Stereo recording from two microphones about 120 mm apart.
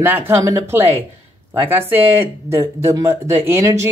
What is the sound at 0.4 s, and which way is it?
Speech, 30° right (ahead or behind).